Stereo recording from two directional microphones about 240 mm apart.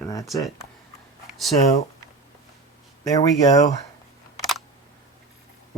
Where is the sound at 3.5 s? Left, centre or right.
Centre.